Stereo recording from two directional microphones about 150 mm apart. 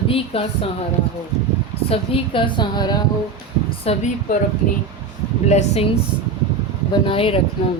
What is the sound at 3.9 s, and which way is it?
Speech, 45° left (ahead or behind).